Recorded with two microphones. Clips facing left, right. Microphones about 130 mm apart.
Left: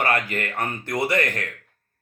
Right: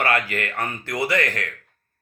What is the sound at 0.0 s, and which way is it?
Speech, 20° left (ahead or behind).